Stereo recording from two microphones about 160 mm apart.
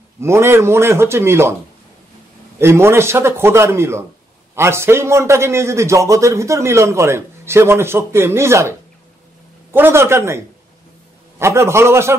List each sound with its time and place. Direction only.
0.2 s a man's voice: 15° right (ahead or behind)
2.6 s a man's voice: 15° right (ahead or behind)